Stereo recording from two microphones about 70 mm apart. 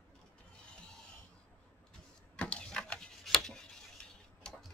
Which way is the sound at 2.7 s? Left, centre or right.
Centre.